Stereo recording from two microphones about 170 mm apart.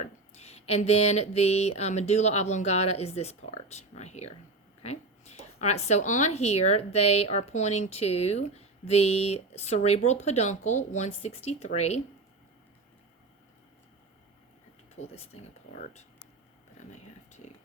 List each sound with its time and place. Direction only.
0.0 s speech: 40° left (ahead or behind)
14.9 s speech: 35° left (ahead or behind)
16.8 s a sound: 45° left (ahead or behind)
17.4 s whispering: 40° left (ahead or behind)